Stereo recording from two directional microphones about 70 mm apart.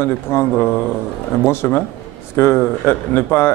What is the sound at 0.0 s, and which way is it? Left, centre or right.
Speech, left.